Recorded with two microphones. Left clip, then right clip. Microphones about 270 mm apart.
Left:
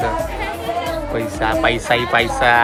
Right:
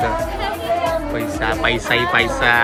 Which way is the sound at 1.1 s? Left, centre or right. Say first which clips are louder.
Left 2 dB; centre.